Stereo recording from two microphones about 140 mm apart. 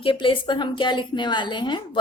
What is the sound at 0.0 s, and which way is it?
A woman's voice, 35° left (ahead or behind).